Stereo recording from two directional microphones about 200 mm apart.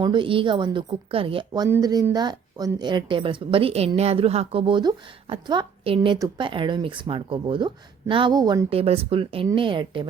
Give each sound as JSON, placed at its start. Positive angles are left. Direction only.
{"t": 0.0, "sound": "a woman's voice", "side_deg": -25}